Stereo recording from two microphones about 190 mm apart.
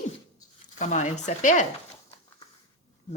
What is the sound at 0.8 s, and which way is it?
Speech, 40° left (ahead or behind).